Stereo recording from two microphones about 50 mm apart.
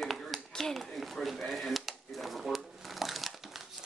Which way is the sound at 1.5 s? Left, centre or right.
Centre.